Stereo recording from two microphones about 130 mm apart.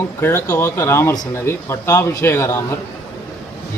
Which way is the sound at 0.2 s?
20° left (ahead or behind).